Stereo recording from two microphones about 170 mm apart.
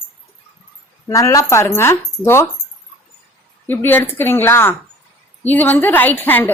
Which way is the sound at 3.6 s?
10° left (ahead or behind).